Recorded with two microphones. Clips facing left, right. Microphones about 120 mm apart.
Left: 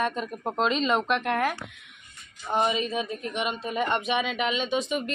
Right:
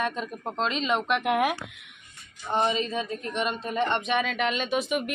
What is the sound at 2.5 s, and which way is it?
A woman's voice, 10° left (ahead or behind).